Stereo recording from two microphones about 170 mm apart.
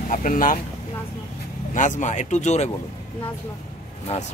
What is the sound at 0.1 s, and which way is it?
Speech, 50° left (ahead or behind).